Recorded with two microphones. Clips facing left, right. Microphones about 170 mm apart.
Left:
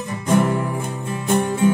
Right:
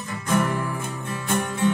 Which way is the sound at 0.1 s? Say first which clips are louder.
Left 5 dB; 25° left (ahead or behind).